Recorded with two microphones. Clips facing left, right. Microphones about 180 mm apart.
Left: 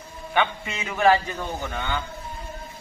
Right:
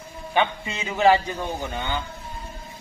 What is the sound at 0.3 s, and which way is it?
A man's voice, 20° right (ahead or behind).